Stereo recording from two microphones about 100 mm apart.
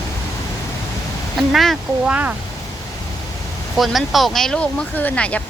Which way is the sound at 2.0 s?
10° right (ahead or behind).